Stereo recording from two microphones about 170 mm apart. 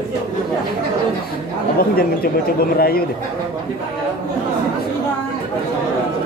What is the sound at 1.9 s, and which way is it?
Speech, 60° left (ahead or behind).